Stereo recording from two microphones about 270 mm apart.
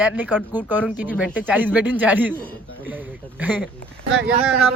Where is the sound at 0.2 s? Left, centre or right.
Centre.